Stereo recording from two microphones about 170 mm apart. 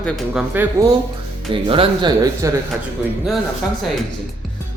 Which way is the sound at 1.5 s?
30° right (ahead or behind).